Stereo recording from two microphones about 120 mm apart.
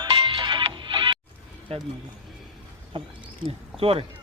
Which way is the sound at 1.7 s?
55° right (ahead or behind).